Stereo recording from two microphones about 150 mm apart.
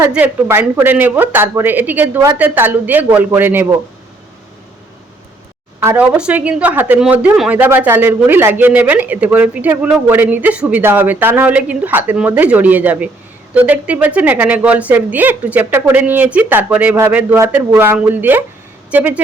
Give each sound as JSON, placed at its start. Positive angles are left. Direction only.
{"t": 0.1, "sound": "speech", "side_deg": -10}
{"t": 5.8, "sound": "speech", "side_deg": -15}